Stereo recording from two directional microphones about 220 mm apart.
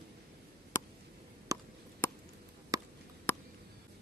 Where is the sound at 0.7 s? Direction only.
15° left (ahead or behind).